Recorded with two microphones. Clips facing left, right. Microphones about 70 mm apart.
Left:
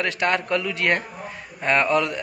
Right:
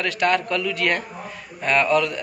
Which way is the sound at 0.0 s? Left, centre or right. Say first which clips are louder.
Right 2 dB; left.